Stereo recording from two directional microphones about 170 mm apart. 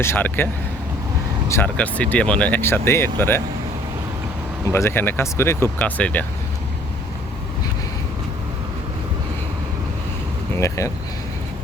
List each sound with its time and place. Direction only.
0.0 s speech: 15° left (ahead or behind)
1.5 s speech: 10° left (ahead or behind)
4.6 s speech: 15° left (ahead or behind)
10.6 s speech: 20° left (ahead or behind)